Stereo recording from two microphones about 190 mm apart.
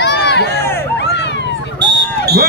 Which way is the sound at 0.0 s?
60° left (ahead or behind).